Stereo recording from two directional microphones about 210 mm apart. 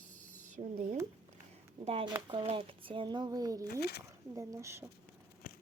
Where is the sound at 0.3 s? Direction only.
90° right.